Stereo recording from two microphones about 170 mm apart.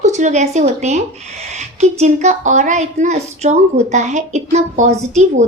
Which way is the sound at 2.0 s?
45° right (ahead or behind).